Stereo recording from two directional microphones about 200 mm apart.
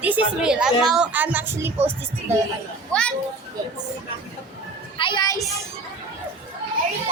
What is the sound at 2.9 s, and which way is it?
Speech, 5° left (ahead or behind).